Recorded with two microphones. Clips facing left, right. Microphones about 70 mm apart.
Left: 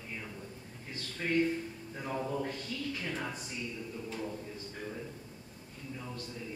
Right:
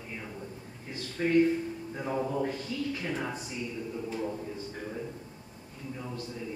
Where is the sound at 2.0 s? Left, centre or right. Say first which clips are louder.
Right 4 dB; centre.